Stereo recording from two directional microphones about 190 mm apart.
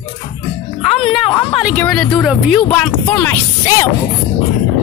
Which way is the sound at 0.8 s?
35° left (ahead or behind).